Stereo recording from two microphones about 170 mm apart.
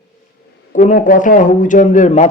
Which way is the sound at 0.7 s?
50° left (ahead or behind).